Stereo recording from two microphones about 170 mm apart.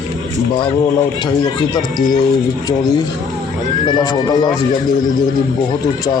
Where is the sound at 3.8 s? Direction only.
25° left (ahead or behind).